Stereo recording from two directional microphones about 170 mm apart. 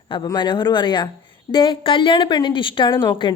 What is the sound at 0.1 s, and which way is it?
A woman's voice, 25° left (ahead or behind).